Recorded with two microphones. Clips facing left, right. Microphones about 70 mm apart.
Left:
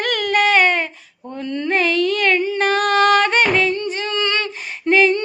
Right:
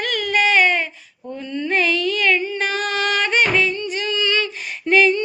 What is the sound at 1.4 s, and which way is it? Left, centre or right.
Mantra, left.